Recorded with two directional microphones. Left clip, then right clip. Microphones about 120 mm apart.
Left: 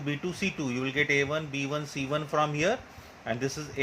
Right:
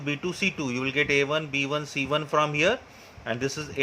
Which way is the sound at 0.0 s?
25° right (ahead or behind).